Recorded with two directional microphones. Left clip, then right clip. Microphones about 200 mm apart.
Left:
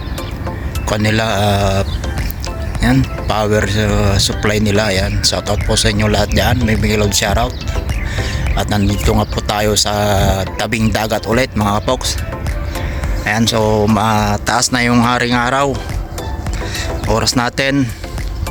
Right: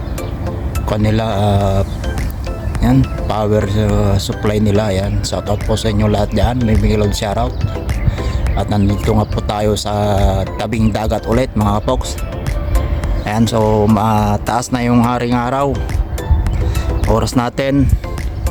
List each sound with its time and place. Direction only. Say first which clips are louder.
0.9 s speech: left 2 dB; 5° right (ahead or behind)
13.2 s speech: left 1 dB; 10° right (ahead or behind)
17.2 s speech: left 3 dB; 10° right (ahead or behind)